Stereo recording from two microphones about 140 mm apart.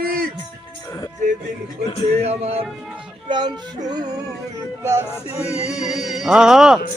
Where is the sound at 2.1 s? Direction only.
50° right (ahead or behind).